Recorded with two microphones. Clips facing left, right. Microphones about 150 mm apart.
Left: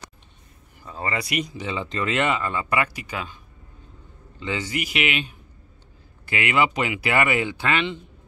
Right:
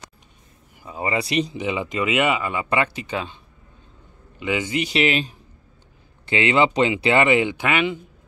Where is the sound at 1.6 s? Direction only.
15° right (ahead or behind).